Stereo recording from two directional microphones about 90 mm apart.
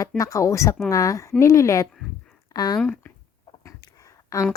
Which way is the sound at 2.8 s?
15° left (ahead or behind).